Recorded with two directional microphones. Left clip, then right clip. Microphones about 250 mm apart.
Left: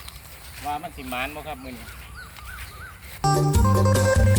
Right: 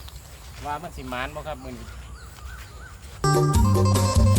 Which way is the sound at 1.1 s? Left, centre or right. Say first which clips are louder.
Left 1 dB; centre.